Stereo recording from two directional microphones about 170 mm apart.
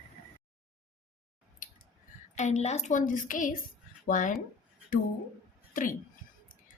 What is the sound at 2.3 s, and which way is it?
Speech, 40° left (ahead or behind).